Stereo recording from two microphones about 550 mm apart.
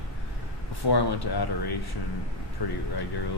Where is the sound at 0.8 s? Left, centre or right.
Left.